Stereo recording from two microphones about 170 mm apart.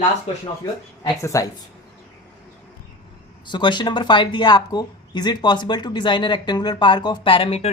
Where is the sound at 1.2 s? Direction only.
20° left (ahead or behind).